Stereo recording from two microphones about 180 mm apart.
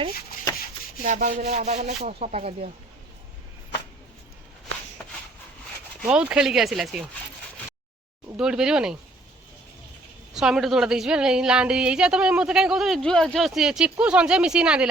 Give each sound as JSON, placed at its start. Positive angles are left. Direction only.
{"t": 1.0, "sound": "rub", "side_deg": -45}
{"t": 6.1, "sound": "speech", "side_deg": -5}
{"t": 8.4, "sound": "speech", "side_deg": -5}
{"t": 10.3, "sound": "speech", "side_deg": -5}